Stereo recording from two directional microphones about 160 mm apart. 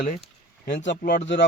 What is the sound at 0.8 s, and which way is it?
Speech, 90° left.